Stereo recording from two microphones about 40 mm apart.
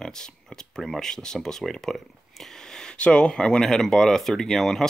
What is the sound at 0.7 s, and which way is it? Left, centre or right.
Speech, centre.